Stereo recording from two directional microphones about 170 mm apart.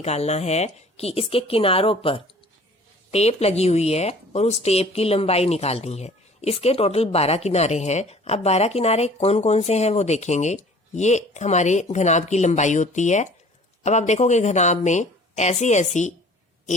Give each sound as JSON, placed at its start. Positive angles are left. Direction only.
{"t": 0.0, "sound": "a woman's voice", "side_deg": 40}